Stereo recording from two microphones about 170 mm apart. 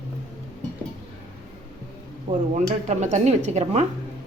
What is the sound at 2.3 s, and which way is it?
Speech, 40° right (ahead or behind).